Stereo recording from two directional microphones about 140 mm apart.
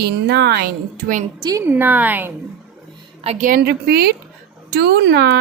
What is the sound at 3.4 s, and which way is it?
Speech, 80° right.